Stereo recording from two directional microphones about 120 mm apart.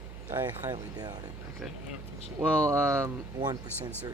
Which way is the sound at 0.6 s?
35° right (ahead or behind).